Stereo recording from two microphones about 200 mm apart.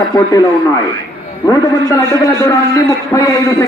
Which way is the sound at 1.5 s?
15° left (ahead or behind).